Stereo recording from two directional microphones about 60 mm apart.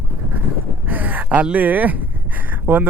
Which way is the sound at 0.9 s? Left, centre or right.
Right.